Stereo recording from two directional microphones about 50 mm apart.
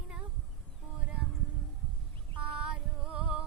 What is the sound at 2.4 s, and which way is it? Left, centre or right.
Female singing, centre.